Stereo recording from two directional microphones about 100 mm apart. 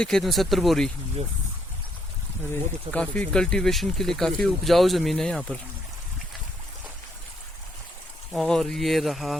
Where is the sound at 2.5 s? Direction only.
15° left (ahead or behind).